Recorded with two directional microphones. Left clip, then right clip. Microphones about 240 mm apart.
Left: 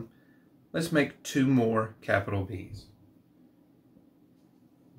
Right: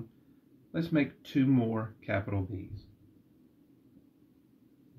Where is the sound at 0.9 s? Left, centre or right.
Centre.